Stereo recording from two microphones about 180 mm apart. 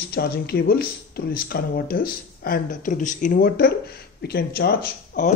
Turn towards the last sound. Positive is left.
turn(degrees=50)  # may be behind; listen again after turning